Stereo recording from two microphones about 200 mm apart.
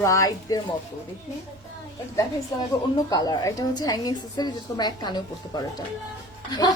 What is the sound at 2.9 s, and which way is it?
A woman's voice, 20° left (ahead or behind).